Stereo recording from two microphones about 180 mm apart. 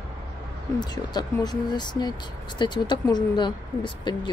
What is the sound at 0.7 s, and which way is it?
Speech, 25° left (ahead or behind).